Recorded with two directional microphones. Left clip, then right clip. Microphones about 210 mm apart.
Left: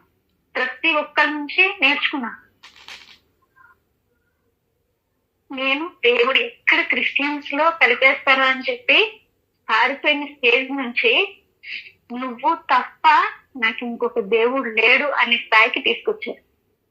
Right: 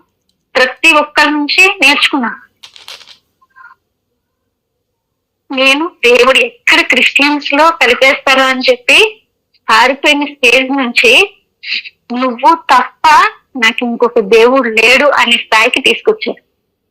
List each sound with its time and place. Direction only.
0.5 s speech: 40° right (ahead or behind)
5.5 s speech: 40° right (ahead or behind)